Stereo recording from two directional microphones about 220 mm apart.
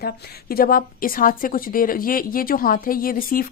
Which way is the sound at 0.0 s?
45° left (ahead or behind).